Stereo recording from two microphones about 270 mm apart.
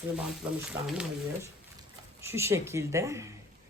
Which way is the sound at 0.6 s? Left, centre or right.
Centre.